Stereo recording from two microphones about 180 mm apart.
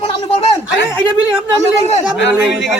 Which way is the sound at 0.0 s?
35° left (ahead or behind).